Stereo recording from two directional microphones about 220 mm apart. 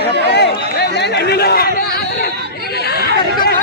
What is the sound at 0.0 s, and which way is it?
Chatter, 50° left (ahead or behind).